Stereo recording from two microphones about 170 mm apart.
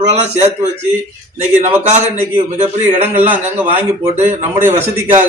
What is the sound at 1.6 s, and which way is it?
Speech, 40° right (ahead or behind).